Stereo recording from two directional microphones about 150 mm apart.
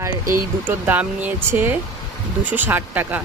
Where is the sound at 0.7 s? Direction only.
10° right (ahead or behind).